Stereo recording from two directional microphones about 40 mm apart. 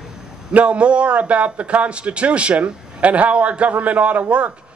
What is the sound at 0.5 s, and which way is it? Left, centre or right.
A man's voice, right.